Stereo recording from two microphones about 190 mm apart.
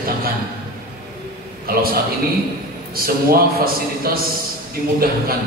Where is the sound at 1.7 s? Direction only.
50° right (ahead or behind).